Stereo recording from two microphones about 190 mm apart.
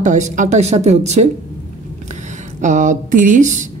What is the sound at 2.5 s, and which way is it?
Speech, 40° right (ahead or behind).